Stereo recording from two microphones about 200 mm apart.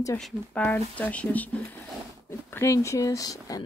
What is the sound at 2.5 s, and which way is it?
Speech, 15° left (ahead or behind).